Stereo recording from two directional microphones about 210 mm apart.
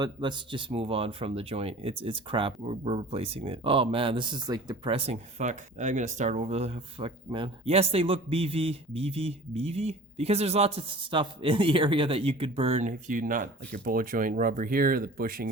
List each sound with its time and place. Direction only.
0.0 s speech: 20° right (ahead or behind); by 15.4 s 45° right (ahead or behind)